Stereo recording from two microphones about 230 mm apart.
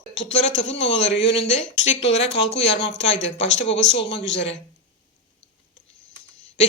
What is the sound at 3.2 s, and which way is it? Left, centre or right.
Speech, left.